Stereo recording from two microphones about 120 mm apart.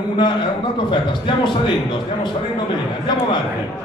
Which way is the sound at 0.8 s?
40° left (ahead or behind).